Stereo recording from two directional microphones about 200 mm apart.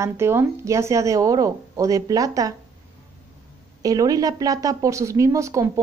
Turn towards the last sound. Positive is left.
turn(degrees=-15)  # may be behind; listen again after turning